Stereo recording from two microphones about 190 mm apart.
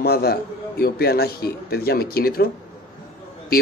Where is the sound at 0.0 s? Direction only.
55° left (ahead or behind).